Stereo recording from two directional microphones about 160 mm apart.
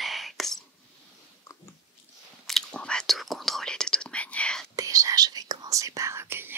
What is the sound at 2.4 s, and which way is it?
Whispering, 5° left (ahead or behind).